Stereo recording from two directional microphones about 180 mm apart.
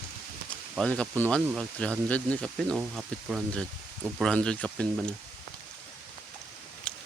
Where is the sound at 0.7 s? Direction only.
5° left (ahead or behind).